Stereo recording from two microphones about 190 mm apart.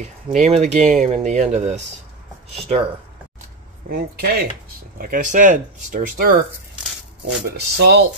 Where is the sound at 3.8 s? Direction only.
55° right (ahead or behind).